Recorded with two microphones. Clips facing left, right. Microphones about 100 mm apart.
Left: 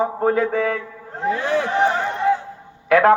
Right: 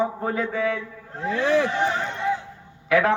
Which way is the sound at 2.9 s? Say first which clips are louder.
Left 6 dB; 45° left (ahead or behind).